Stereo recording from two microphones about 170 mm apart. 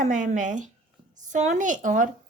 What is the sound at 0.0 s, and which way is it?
A woman's voice, 45° right (ahead or behind).